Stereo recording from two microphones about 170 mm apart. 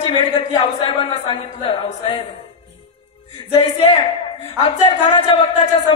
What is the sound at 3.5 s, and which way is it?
A man's voice, 35° left (ahead or behind).